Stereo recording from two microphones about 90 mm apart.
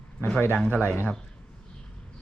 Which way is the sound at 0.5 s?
15° left (ahead or behind).